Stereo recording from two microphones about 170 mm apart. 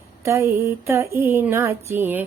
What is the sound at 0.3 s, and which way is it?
Female singing, 15° right (ahead or behind).